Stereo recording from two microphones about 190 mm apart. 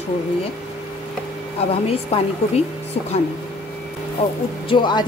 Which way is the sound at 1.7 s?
30° left (ahead or behind).